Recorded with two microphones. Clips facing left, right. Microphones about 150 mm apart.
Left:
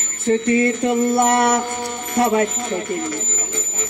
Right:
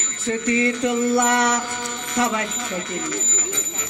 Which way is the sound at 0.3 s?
45° left (ahead or behind).